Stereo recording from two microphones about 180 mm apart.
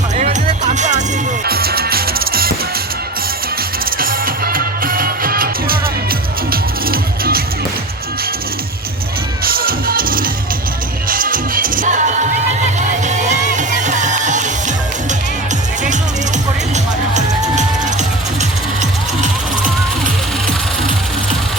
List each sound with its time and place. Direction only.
0.2 s music: 40° right (ahead or behind)
1.5 s music: 60° right (ahead or behind)
3.8 s music: 55° right (ahead or behind)
9.4 s music: 55° right (ahead or behind)
17.5 s music: 40° right (ahead or behind)